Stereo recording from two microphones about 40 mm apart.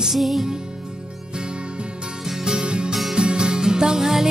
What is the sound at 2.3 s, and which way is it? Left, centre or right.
Music, centre.